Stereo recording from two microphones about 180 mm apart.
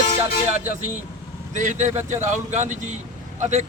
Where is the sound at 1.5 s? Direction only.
45° right (ahead or behind).